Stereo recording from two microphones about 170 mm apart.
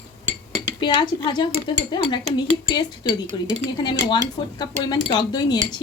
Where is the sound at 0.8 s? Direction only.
30° left (ahead or behind).